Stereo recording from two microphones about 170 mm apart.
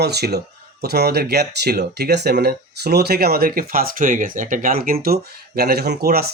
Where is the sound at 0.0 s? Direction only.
75° right (ahead or behind).